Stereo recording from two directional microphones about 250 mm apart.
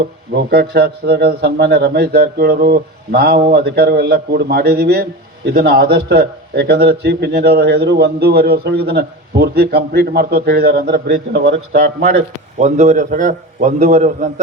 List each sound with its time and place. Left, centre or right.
0.5 s a man's voice: right
12.5 s a man's voice: right